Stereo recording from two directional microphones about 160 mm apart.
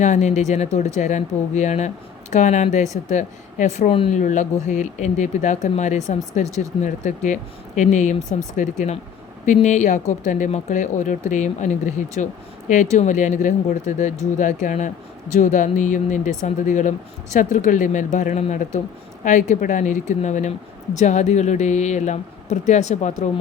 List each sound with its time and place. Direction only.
0.0 s speech: 45° left (ahead or behind)
4.2 s speech: 50° left (ahead or behind)